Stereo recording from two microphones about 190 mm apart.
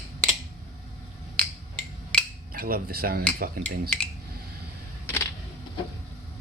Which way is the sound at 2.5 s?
50° right (ahead or behind).